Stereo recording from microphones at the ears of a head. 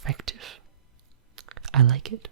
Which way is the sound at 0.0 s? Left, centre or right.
Right.